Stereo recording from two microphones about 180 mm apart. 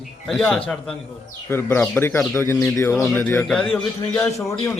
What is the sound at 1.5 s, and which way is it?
A man's voice, 10° left (ahead or behind).